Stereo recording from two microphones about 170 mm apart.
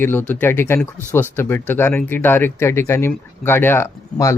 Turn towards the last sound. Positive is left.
turn(degrees=15)  # may be behind; listen again after turning